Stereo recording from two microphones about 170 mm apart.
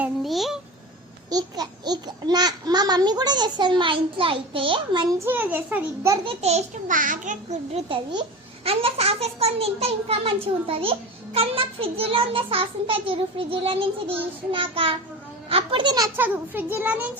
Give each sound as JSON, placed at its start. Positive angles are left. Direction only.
{"t": 0.0, "sound": "a child's voice", "side_deg": 0}
{"t": 1.3, "sound": "a child's voice", "side_deg": -25}
{"t": 5.2, "sound": "a child's voice", "side_deg": -10}
{"t": 6.2, "sound": "a child's voice", "side_deg": -40}
{"t": 16.1, "sound": "a child's voice", "side_deg": -10}